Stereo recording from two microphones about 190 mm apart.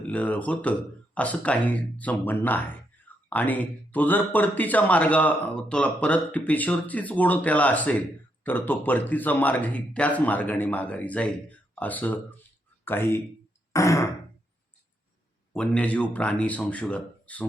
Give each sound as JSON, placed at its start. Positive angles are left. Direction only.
{"t": 0.1, "sound": "speech", "side_deg": 10}
{"t": 15.5, "sound": "speech", "side_deg": 5}